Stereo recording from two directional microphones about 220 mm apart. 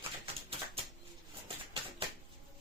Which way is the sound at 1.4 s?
25° right (ahead or behind).